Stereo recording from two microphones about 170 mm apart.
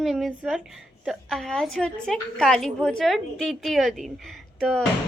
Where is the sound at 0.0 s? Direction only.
Centre (ahead or behind).